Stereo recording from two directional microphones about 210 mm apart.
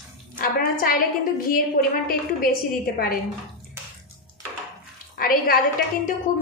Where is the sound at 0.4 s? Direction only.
45° left (ahead or behind).